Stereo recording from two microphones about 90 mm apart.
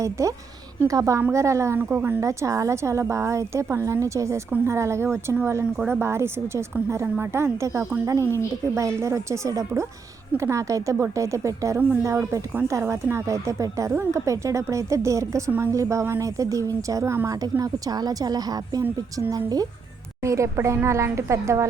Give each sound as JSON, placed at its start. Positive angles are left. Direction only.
{"t": 0.0, "sound": "speech", "side_deg": -35}
{"t": 2.2, "sound": "a woman's voice", "side_deg": -35}
{"t": 20.2, "sound": "speech", "side_deg": -35}